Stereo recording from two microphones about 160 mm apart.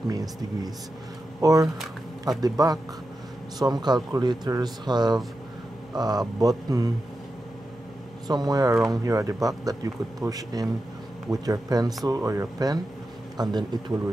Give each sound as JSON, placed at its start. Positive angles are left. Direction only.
{"t": 0.1, "sound": "speech", "side_deg": -25}
{"t": 8.3, "sound": "speech", "side_deg": -25}